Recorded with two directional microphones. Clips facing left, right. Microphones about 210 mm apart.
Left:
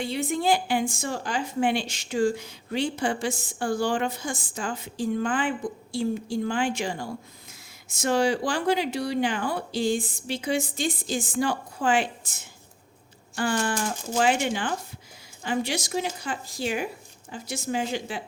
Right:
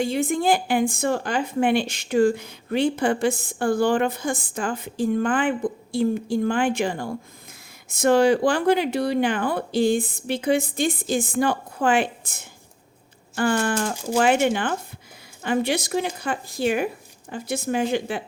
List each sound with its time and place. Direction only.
0.0 s speech: 50° right (ahead or behind)